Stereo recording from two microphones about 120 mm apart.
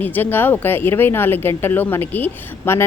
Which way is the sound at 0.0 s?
15° left (ahead or behind).